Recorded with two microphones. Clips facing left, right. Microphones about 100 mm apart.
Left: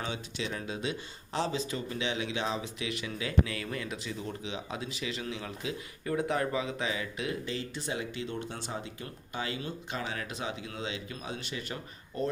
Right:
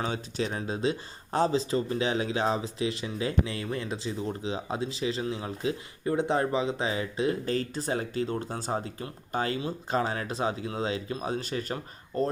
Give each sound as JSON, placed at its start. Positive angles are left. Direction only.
{"t": 0.0, "sound": "speech", "side_deg": -40}